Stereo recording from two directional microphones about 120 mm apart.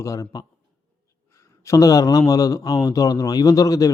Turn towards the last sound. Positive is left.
turn(degrees=30)  # may be behind; listen again after turning